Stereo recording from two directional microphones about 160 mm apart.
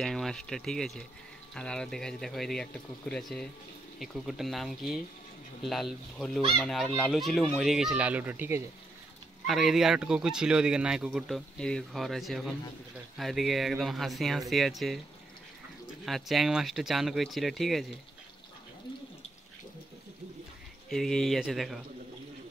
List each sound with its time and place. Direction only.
0.0 s speech: centre (ahead or behind)
9.5 s speech: centre (ahead or behind)
16.1 s speech: centre (ahead or behind)
20.9 s speech: centre (ahead or behind)